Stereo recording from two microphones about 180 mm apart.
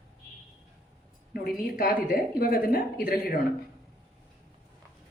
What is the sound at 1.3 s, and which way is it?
A woman's voice, 55° left (ahead or behind).